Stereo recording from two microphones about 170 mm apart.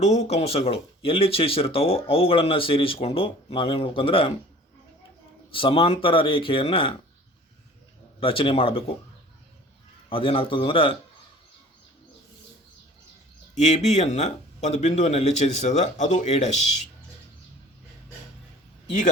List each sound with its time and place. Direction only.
0.0 s speech: 40° left (ahead or behind)
5.5 s speech: 30° left (ahead or behind)
8.2 s speech: 30° left (ahead or behind)
10.1 s speech: 30° left (ahead or behind)
13.6 s speech: 40° left (ahead or behind)